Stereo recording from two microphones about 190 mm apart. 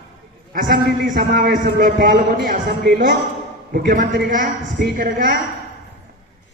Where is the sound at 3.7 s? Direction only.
60° right (ahead or behind).